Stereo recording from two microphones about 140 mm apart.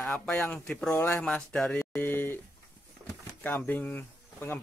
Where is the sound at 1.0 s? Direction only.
15° left (ahead or behind).